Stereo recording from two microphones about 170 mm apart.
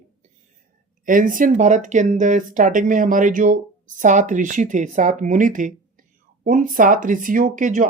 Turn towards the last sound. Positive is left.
turn(degrees=-50)  # may be behind; listen again after turning